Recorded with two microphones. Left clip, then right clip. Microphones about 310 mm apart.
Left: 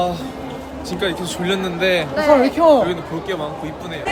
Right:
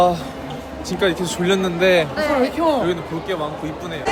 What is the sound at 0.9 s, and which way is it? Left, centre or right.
Speech, centre.